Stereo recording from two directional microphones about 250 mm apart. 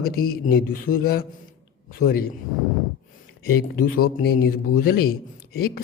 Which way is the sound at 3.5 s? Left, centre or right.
Left.